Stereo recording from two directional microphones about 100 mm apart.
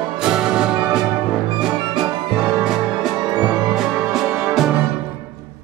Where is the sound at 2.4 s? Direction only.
10° right (ahead or behind).